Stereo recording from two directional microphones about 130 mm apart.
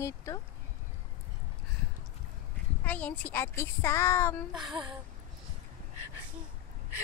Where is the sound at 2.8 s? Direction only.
10° left (ahead or behind).